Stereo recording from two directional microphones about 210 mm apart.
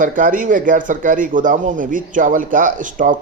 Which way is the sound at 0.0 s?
40° right (ahead or behind).